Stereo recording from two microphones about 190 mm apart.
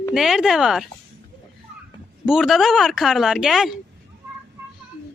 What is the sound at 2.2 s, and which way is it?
A woman's voice, centre (ahead or behind).